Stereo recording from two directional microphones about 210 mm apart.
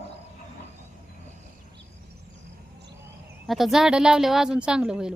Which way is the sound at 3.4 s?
Centre (ahead or behind).